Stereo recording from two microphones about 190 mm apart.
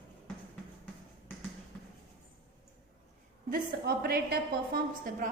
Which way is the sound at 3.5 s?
55° right (ahead or behind).